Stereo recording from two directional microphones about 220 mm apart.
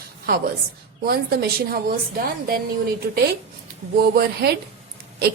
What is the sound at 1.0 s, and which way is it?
A woman's voice, 45° right (ahead or behind).